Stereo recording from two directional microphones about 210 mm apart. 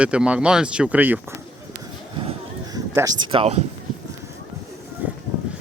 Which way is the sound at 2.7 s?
15° right (ahead or behind).